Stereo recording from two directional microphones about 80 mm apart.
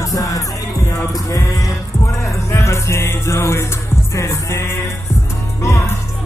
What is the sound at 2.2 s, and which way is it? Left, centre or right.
Music, left.